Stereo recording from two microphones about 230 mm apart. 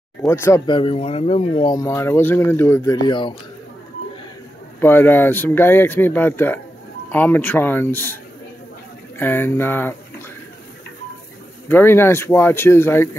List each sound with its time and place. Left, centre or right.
0.2 s speech: centre
4.7 s speech: centre
9.2 s speech: centre
11.7 s speech: centre